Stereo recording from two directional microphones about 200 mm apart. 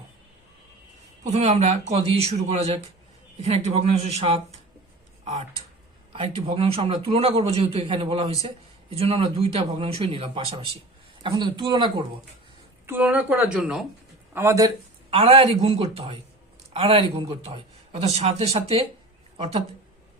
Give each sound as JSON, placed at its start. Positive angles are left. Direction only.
{"t": 1.3, "sound": "a man's voice", "side_deg": -30}
{"t": 6.1, "sound": "a man's voice", "side_deg": -30}
{"t": 12.8, "sound": "speech", "side_deg": -10}
{"t": 14.3, "sound": "speech", "side_deg": -15}
{"t": 15.1, "sound": "a man's voice", "side_deg": -30}